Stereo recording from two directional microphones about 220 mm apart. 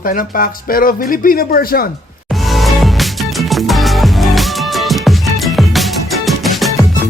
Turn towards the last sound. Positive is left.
turn(degrees=0)  # may be behind; listen again after turning